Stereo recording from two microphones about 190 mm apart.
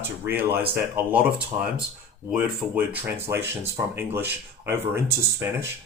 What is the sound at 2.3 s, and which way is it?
Speech, 10° right (ahead or behind).